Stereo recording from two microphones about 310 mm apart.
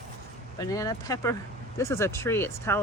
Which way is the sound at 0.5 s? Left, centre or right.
Centre.